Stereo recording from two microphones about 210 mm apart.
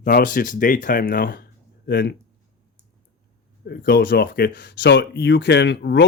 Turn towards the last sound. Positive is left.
turn(degrees=55)  # may be behind; listen again after turning